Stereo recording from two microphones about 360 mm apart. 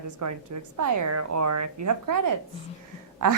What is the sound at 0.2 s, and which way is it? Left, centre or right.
A woman's voice, right.